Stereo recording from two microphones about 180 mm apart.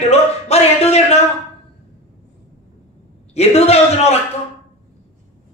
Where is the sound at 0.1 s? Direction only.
35° left (ahead or behind).